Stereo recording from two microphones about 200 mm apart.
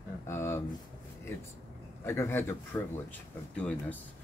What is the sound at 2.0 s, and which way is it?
Speech, 10° left (ahead or behind).